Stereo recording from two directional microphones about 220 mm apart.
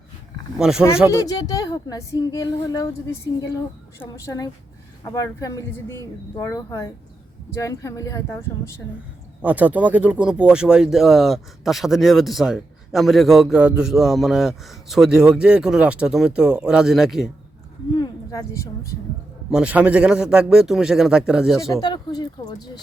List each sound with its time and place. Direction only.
0.6 s speech: 5° right (ahead or behind)
1.1 s speech: 15° left (ahead or behind)
9.4 s speech: 5° right (ahead or behind)
17.9 s speech: 20° left (ahead or behind)
19.5 s speech: 5° right (ahead or behind)
21.8 s speech: 20° left (ahead or behind)